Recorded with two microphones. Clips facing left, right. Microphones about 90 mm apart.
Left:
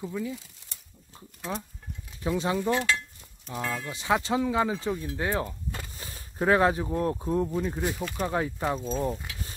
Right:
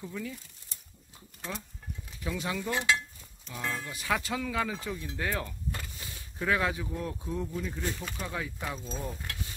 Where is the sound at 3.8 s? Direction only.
25° left (ahead or behind).